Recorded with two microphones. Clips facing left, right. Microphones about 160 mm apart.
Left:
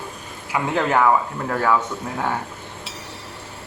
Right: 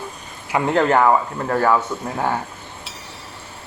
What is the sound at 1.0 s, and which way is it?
Speech, 10° right (ahead or behind).